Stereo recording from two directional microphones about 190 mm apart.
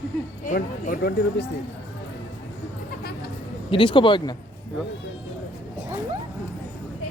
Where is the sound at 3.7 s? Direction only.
25° left (ahead or behind).